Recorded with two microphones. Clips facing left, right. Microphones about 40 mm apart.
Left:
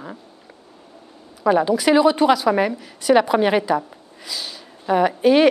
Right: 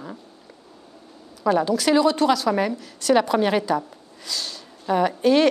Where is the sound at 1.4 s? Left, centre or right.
Centre.